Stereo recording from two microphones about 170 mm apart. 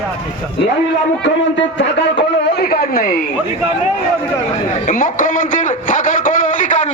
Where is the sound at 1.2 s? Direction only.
90° left; by 3.2 s 60° left (ahead or behind).